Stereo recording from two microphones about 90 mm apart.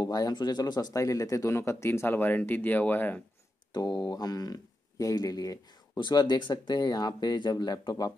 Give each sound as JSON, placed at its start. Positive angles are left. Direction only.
{"t": 0.0, "sound": "speech", "side_deg": 50}
{"t": 3.7, "sound": "speech", "side_deg": 50}
{"t": 5.9, "sound": "speech", "side_deg": 55}